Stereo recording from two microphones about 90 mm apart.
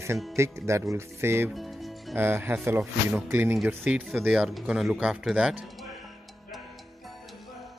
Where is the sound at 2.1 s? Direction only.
25° right (ahead or behind).